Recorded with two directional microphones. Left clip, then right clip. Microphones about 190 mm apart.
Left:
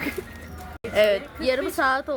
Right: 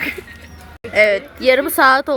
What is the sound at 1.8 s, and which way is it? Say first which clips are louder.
Speech: right 11 dB; 50° right (ahead or behind).